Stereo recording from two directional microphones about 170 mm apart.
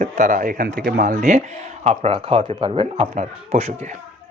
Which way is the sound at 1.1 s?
40° right (ahead or behind).